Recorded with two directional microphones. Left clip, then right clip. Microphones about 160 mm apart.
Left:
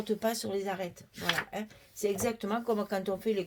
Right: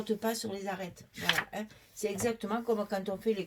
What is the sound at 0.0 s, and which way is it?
Speech, 50° left (ahead or behind).